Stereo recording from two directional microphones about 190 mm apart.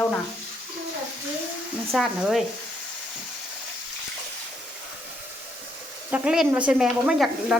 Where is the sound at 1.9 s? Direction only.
Centre (ahead or behind).